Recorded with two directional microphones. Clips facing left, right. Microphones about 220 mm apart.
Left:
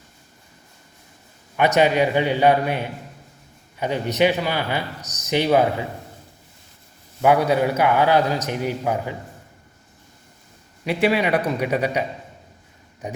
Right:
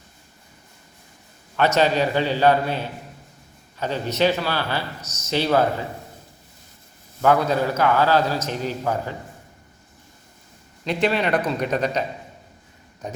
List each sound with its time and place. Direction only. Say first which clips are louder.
1.5 s a man's voice: left 2 dB; 15° left (ahead or behind)
7.2 s a man's voice: left 2 dB; 15° left (ahead or behind)
10.8 s a man's voice: left 2 dB; 10° left (ahead or behind)
13.0 s a man's voice: left 2 dB; 15° left (ahead or behind)